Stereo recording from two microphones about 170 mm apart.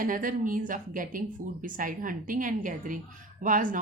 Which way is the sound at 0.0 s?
55° right (ahead or behind).